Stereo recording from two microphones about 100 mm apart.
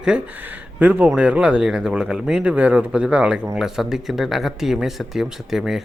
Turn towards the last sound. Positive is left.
turn(degrees=-5)  # may be behind; listen again after turning